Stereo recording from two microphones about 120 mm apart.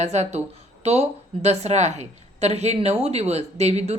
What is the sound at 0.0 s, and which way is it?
A woman's voice, 65° right (ahead or behind).